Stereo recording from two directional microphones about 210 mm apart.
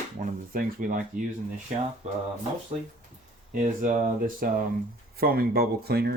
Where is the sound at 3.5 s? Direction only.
40° right (ahead or behind).